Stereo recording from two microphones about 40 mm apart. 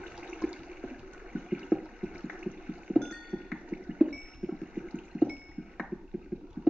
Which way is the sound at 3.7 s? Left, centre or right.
Right.